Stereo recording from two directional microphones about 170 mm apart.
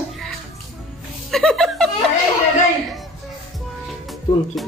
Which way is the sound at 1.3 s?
Centre (ahead or behind).